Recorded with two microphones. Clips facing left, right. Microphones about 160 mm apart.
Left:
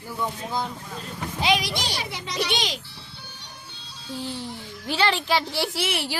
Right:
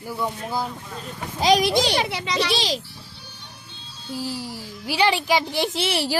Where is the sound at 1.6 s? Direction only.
75° right (ahead or behind).